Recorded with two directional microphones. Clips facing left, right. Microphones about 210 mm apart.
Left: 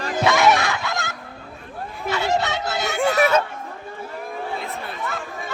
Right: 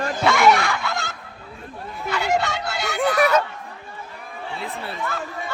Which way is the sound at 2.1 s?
20° left (ahead or behind).